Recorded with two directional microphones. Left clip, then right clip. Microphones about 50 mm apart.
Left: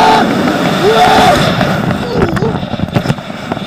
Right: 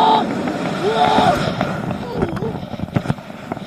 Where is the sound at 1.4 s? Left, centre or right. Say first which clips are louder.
Left 9 dB; right.